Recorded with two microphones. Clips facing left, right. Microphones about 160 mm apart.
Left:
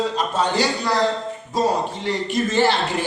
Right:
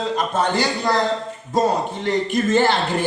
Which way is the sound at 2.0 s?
50° right (ahead or behind).